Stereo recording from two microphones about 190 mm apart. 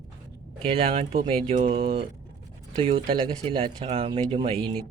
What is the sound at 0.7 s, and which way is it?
Speech, 30° right (ahead or behind).